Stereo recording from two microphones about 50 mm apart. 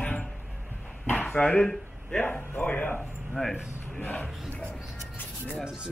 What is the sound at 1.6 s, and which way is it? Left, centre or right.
Speech, centre.